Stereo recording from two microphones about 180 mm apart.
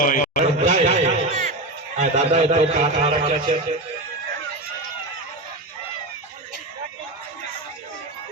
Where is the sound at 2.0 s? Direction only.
35° right (ahead or behind).